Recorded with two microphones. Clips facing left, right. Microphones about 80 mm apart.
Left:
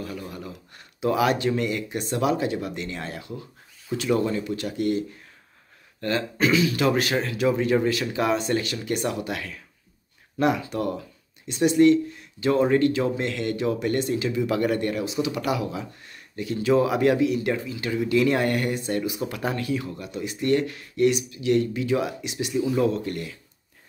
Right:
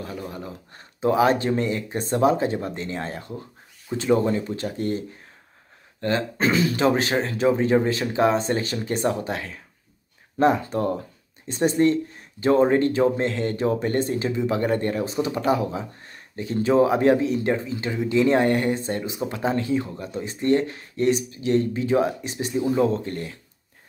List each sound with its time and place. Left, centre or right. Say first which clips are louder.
0.0 s speech: right 1 dB; right
6.8 s speech: right 2 dB; right